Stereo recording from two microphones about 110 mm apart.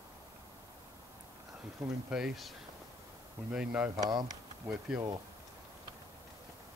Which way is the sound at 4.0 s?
40° right (ahead or behind).